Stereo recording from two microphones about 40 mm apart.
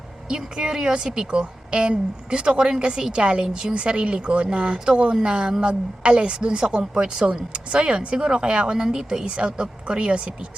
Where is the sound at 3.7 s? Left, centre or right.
Right.